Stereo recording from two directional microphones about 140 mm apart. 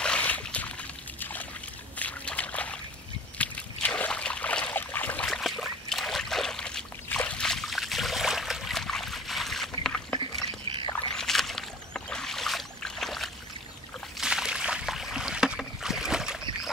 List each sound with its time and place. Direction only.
0.0 s a sound: 10° left (ahead or behind)
11.1 s rowboat: 5° left (ahead or behind)
14.1 s boat: 5° right (ahead or behind)